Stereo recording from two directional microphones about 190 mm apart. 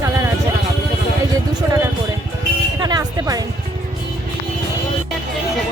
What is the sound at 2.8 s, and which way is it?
Music, 20° right (ahead or behind).